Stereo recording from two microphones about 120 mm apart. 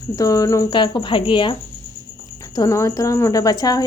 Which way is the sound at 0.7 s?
40° left (ahead or behind).